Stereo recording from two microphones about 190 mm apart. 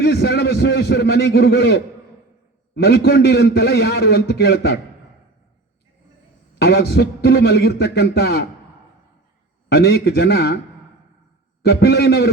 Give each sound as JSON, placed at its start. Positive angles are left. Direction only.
{"t": 0.0, "sound": "a man's voice", "side_deg": 60}
{"t": 6.6, "sound": "a man's voice", "side_deg": 60}
{"t": 9.6, "sound": "a man's voice", "side_deg": 60}
{"t": 11.6, "sound": "a man's voice", "side_deg": 60}